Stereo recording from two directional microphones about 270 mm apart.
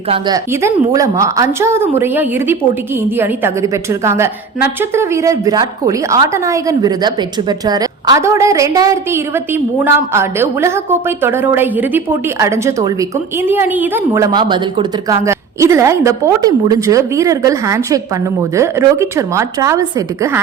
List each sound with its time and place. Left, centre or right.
0.1 s a woman's voice: centre